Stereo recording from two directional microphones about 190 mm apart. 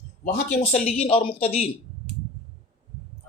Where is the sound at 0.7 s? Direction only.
35° left (ahead or behind).